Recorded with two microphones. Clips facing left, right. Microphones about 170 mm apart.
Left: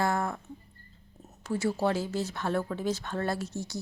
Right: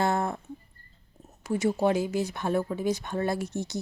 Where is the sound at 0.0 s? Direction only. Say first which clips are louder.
Right 2 dB; 25° right (ahead or behind).